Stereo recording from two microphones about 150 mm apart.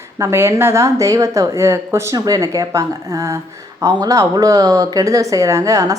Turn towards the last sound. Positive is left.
turn(degrees=-20)  # may be behind; listen again after turning